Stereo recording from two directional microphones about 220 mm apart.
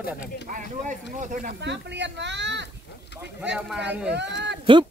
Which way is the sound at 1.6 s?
50° right (ahead or behind).